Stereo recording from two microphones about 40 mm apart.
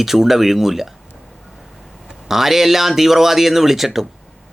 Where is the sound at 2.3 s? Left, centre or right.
Centre.